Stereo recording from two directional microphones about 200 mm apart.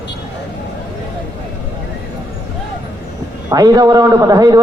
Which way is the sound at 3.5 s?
20° right (ahead or behind).